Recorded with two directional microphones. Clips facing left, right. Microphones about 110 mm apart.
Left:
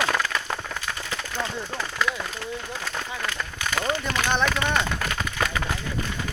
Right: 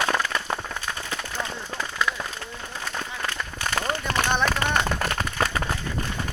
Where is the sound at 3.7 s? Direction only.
35° right (ahead or behind).